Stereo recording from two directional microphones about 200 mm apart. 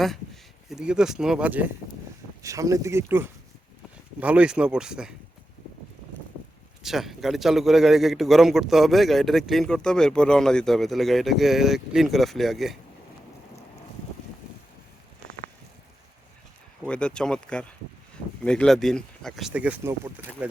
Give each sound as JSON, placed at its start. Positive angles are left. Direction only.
{"t": 0.7, "sound": "a man's voice", "side_deg": -5}
{"t": 6.8, "sound": "a man's voice", "side_deg": 0}
{"t": 16.8, "sound": "a man's voice", "side_deg": 5}